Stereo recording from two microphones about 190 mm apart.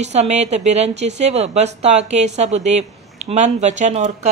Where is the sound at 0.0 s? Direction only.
35° right (ahead or behind).